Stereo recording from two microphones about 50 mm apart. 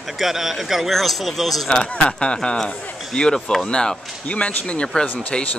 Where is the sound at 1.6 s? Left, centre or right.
Centre.